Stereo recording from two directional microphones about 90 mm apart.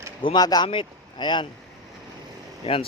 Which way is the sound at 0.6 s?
70° left (ahead or behind).